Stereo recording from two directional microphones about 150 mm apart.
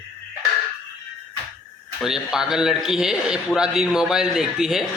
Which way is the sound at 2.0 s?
5° right (ahead or behind).